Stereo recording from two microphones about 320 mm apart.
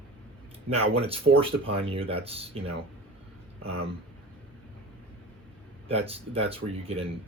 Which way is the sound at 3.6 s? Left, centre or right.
Centre.